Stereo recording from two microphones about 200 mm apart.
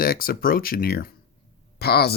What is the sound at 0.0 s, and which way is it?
Speech, 50° left (ahead or behind).